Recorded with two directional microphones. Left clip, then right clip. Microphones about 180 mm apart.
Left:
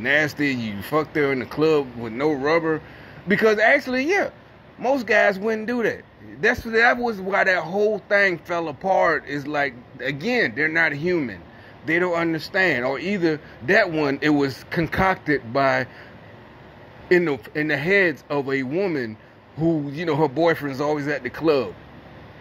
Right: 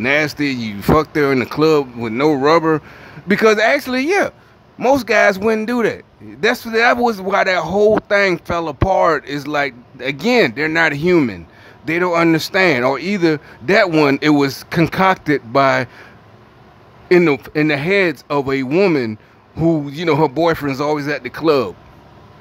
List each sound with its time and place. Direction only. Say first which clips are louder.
0.0 s speech: right 4 dB; 15° right (ahead or behind)
17.1 s speech: right 7 dB; 15° right (ahead or behind)
18.7 s speech: right 10 dB; 40° right (ahead or behind)
19.6 s speech: right 6 dB; 20° right (ahead or behind)